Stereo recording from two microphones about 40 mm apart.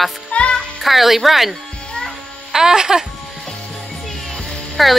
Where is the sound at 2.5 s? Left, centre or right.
Centre.